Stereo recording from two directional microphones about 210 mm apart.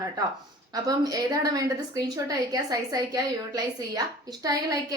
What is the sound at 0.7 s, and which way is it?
A woman's voice, 15° right (ahead or behind).